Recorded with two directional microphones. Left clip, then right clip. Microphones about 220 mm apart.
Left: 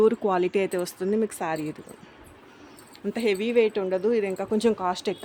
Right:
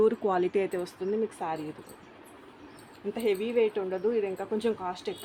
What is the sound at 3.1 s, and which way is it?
Speech, 45° left (ahead or behind).